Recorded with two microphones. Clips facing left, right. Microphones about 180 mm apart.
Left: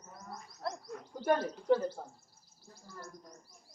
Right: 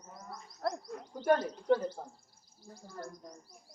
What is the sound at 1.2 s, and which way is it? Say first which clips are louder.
Speech: right 2 dB; 5° left (ahead or behind).